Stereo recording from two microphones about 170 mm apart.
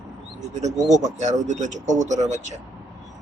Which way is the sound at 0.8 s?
45° right (ahead or behind).